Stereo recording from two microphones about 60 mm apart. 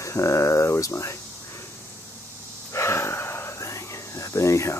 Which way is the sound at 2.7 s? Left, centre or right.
Left.